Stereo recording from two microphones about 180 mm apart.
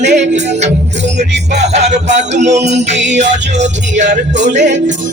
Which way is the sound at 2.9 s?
80° right.